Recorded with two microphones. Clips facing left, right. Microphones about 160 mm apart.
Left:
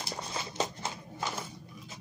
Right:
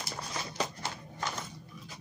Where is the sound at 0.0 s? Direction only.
25° left (ahead or behind).